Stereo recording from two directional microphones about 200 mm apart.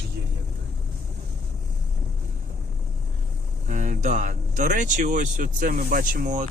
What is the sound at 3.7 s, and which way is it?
Speech, 40° right (ahead or behind).